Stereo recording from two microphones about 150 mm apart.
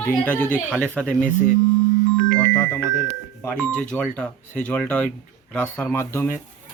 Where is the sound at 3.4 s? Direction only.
10° left (ahead or behind).